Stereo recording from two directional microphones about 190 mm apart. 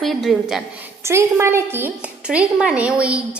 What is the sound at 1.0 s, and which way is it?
A woman's voice, 15° right (ahead or behind).